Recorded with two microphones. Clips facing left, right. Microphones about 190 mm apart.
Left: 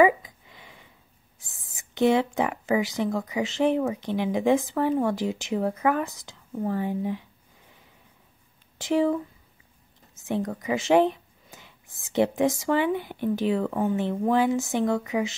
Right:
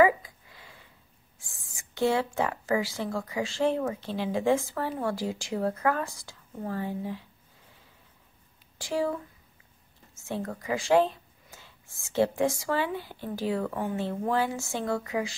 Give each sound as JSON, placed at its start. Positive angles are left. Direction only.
{"t": 0.0, "sound": "a sound", "side_deg": 20}
{"t": 1.4, "sound": "speech", "side_deg": 20}
{"t": 8.7, "sound": "speech", "side_deg": 20}
{"t": 10.1, "sound": "speech", "side_deg": 20}